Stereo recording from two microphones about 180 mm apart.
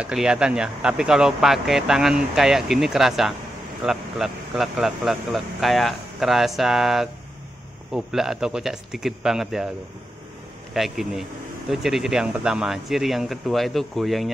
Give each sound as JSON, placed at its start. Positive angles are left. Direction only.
{"t": 0.0, "sound": "speech", "side_deg": -5}
{"t": 10.7, "sound": "speech", "side_deg": 0}